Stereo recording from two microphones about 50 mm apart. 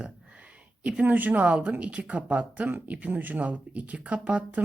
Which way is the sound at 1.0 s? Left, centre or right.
Right.